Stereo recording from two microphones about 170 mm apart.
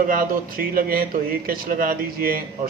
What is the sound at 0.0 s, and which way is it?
Speech, 55° right (ahead or behind).